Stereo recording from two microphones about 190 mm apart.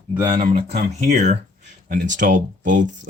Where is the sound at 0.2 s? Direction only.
25° right (ahead or behind).